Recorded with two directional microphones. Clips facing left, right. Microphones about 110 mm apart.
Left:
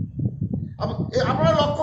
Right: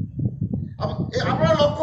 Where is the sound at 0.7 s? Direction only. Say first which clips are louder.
Left 3 dB; 40° left (ahead or behind).